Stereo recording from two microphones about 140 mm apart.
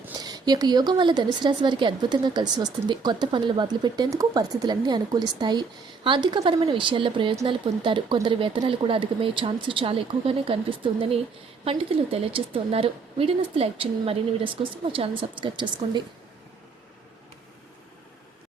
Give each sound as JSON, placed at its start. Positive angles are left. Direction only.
{"t": 0.2, "sound": "speech", "side_deg": -30}